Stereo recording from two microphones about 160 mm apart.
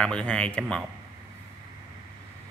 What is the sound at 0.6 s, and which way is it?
Speech, 5° right (ahead or behind).